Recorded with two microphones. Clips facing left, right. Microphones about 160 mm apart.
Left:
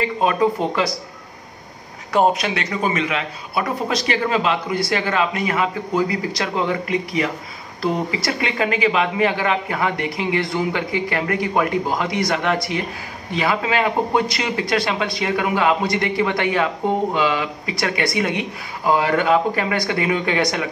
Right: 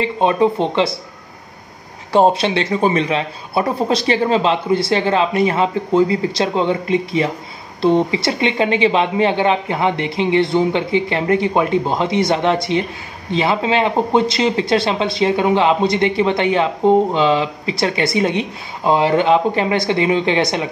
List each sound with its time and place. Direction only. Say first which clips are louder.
0.0 s speech: right 3 dB; 25° right (ahead or behind)
2.1 s speech: right 4 dB; 30° right (ahead or behind)